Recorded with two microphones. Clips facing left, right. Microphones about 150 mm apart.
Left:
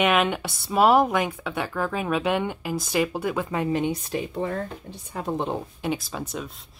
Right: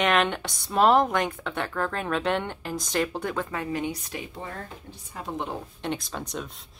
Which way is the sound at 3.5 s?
25° left (ahead or behind).